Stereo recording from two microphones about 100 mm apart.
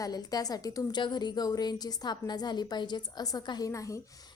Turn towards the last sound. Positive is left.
turn(degrees=35)  # may be behind; listen again after turning